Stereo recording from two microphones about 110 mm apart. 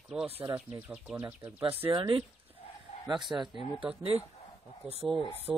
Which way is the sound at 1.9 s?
40° right (ahead or behind).